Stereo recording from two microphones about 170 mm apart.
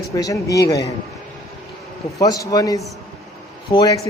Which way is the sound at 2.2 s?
20° left (ahead or behind).